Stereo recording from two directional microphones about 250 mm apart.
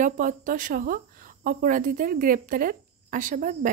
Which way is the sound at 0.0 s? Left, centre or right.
Right.